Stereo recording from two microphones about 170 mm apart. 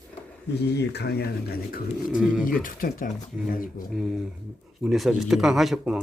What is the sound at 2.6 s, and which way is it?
Speech, 55° left (ahead or behind).